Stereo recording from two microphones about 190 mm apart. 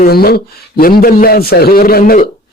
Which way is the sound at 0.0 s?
55° left (ahead or behind).